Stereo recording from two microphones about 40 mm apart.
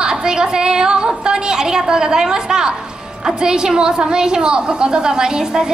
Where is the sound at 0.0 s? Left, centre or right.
Centre.